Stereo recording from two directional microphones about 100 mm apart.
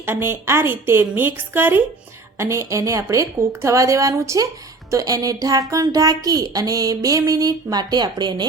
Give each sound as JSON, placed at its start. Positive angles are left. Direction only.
{"t": 0.0, "sound": "a woman's voice", "side_deg": -25}
{"t": 2.4, "sound": "speech", "side_deg": -30}